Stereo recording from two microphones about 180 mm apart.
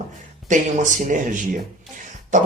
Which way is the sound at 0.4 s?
45° right (ahead or behind).